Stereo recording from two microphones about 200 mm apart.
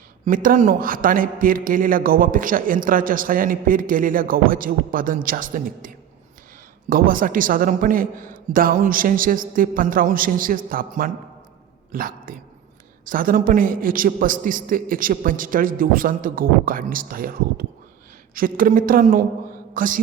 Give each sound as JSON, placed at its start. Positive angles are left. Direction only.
{"t": 0.3, "sound": "a man's voice", "side_deg": -45}
{"t": 6.9, "sound": "a man's voice", "side_deg": -45}